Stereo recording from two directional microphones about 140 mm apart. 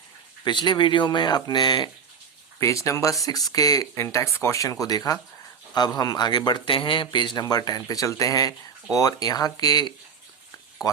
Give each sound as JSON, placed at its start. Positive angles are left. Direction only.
{"t": 0.4, "sound": "a man's voice", "side_deg": 35}